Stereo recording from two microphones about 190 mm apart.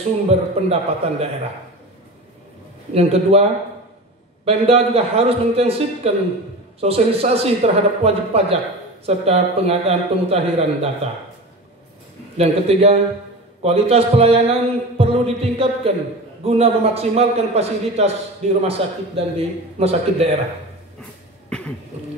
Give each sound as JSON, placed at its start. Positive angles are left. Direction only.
{"t": 0.3, "sound": "a man's voice", "side_deg": -30}
{"t": 2.9, "sound": "a man's voice", "side_deg": -30}
{"t": 4.5, "sound": "a man's voice", "side_deg": -30}
{"t": 12.4, "sound": "a man's voice", "side_deg": -30}
{"t": 21.5, "sound": "cough", "side_deg": 5}